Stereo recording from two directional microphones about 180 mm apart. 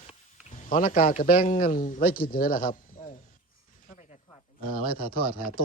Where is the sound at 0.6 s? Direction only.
45° left (ahead or behind).